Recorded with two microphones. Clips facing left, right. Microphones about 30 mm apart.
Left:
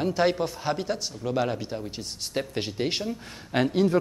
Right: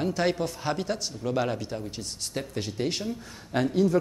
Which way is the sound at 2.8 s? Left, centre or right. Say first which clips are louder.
Even; left.